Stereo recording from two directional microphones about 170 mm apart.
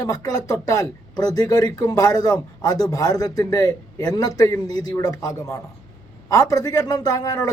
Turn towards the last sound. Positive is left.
turn(degrees=20)  # may be behind; listen again after turning